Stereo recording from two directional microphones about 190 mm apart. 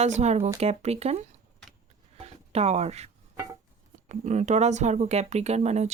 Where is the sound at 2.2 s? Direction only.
35° right (ahead or behind).